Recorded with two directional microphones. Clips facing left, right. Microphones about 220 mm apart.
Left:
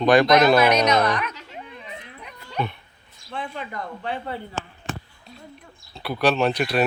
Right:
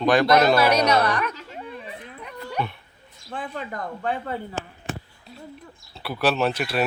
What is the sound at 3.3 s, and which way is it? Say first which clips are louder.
Speech: even; 40° right (ahead or behind).